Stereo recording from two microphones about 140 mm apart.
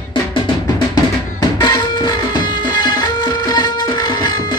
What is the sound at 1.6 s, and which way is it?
Music, 30° left (ahead or behind).